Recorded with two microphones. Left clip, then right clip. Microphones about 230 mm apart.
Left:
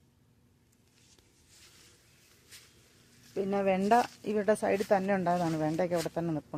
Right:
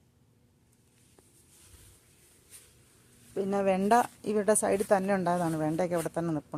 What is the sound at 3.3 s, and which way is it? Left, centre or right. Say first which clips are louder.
A woman's voice: right 1 dB; centre.